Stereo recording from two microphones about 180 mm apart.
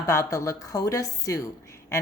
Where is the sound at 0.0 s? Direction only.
15° left (ahead or behind).